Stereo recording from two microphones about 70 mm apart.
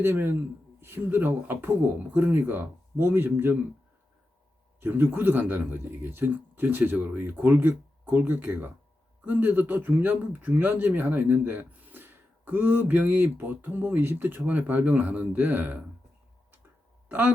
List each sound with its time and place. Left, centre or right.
0.0 s speech: right
4.8 s speech: right
17.1 s a man's voice: right